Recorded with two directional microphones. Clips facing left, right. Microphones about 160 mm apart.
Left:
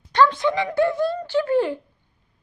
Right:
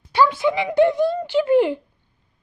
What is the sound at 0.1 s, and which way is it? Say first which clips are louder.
Speech: even; 5° right (ahead or behind).